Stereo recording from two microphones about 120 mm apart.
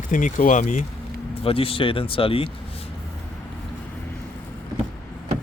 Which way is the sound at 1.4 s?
50° left (ahead or behind).